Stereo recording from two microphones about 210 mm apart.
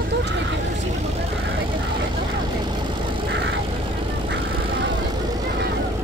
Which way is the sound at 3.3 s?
55° right (ahead or behind).